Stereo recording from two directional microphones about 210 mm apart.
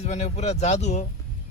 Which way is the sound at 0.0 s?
30° left (ahead or behind).